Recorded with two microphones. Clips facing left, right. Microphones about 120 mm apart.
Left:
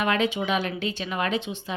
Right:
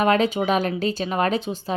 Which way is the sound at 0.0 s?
40° right (ahead or behind).